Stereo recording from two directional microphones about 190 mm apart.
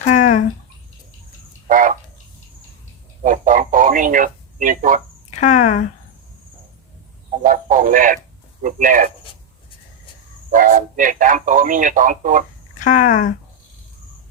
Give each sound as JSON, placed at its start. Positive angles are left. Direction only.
{"t": 0.0, "sound": "a sound", "side_deg": 40}
{"t": 1.6, "sound": "frog", "side_deg": -45}
{"t": 3.2, "sound": "radio", "side_deg": -45}
{"t": 5.4, "sound": "speech", "side_deg": 40}
{"t": 7.4, "sound": "speech", "side_deg": -45}
{"t": 10.5, "sound": "speech", "side_deg": -45}
{"t": 12.8, "sound": "speech", "side_deg": 45}